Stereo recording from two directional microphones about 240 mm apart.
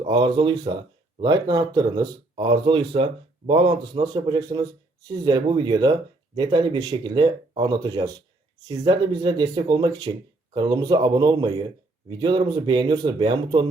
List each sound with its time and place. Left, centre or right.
0.0 s speech: right